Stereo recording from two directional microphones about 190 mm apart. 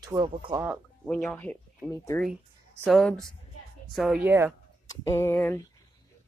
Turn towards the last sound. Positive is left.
turn(degrees=10)  # may be behind; listen again after turning